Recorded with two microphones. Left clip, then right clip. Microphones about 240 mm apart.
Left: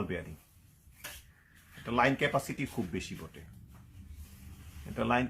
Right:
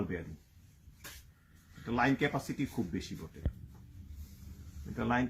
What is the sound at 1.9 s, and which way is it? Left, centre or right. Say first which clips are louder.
Speech: left 3 dB; left.